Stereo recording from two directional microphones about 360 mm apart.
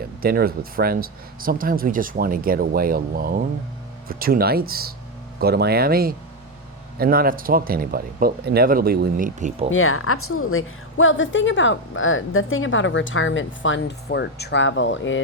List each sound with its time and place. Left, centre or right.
0.2 s speech: right
9.6 s a woman's voice: left